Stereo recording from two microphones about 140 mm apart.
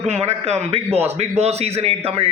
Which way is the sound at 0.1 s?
50° right (ahead or behind).